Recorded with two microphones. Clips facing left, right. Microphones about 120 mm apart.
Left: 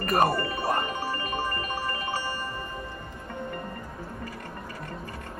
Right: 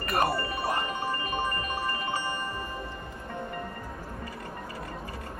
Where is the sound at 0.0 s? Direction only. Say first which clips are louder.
Left 4 dB; 40° left (ahead or behind).